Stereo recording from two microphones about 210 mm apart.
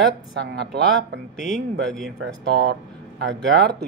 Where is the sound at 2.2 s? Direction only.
55° right (ahead or behind).